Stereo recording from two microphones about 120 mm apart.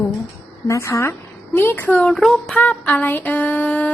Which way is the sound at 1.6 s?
15° left (ahead or behind).